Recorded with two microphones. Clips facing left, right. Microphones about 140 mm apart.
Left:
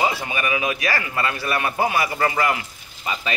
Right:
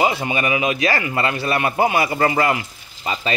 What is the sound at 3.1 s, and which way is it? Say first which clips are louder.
Speech: right 3 dB; 30° right (ahead or behind).